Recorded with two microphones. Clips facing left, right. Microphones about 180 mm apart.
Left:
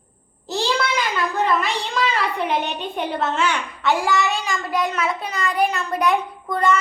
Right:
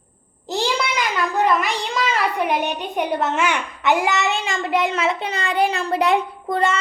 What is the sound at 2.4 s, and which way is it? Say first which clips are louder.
A child's voice: right 2 dB; 10° right (ahead or behind).